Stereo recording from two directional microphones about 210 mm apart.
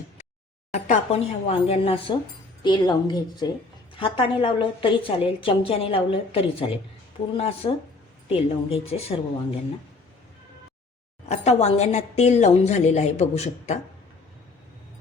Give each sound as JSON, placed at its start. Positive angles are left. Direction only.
{"t": 0.7, "sound": "a woman's voice", "side_deg": 30}
{"t": 11.3, "sound": "a woman's voice", "side_deg": 30}